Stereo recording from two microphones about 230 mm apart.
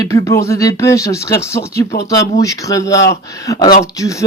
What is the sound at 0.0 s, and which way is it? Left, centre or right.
A man's voice, centre.